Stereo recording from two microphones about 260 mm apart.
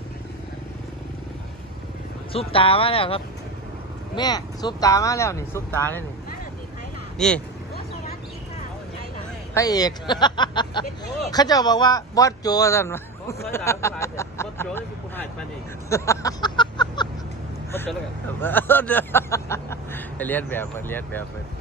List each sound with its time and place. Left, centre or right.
2.3 s speech: left
7.2 s speech: centre
9.5 s speech: centre
15.9 s a sound: centre
18.4 s speech: centre